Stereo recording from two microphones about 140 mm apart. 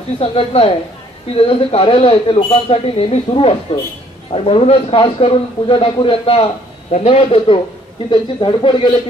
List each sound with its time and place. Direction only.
0.2 s a man's voice: 45° left (ahead or behind)